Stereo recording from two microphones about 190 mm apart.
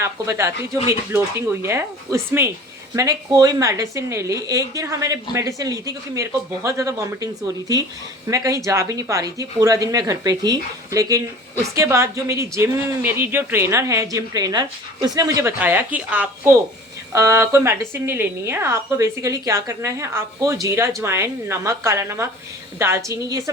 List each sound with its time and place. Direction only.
0.0 s speech: 15° right (ahead or behind)